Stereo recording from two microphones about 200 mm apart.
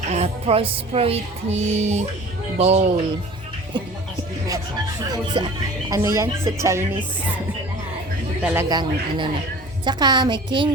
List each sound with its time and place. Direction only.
0.1 s music: 30° right (ahead or behind)
5.1 s speech: 25° right (ahead or behind)
8.4 s speech: 15° right (ahead or behind)